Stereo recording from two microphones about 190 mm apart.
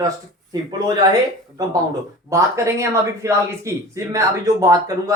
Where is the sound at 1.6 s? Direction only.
20° right (ahead or behind).